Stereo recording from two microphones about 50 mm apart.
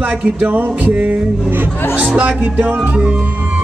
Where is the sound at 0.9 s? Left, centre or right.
Right.